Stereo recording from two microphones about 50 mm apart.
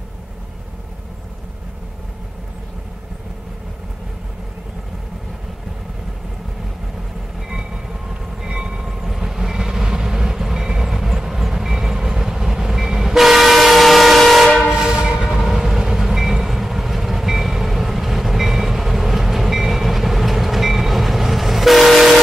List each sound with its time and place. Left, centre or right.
7.3 s train: centre
14.7 s train: centre